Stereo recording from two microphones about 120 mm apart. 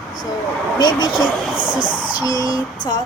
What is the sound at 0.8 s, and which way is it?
Child singing, 40° left (ahead or behind).